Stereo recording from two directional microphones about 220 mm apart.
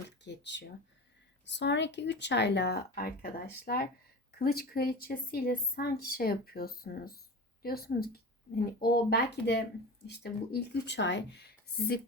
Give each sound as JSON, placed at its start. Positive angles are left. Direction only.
{"t": 0.3, "sound": "speech", "side_deg": 55}